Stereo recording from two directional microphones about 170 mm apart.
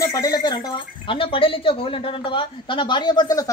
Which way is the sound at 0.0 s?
20° left (ahead or behind).